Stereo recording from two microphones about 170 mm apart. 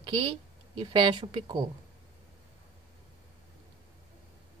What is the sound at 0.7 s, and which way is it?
Speech, 25° right (ahead or behind).